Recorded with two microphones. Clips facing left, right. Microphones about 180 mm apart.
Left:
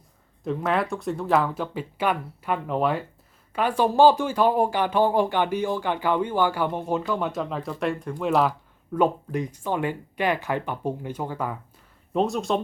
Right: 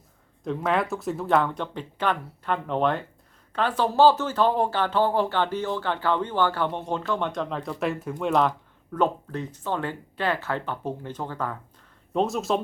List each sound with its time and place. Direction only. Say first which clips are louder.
0.4 s speech: even; centre (ahead or behind)
12.1 s speech: left 1 dB; centre (ahead or behind)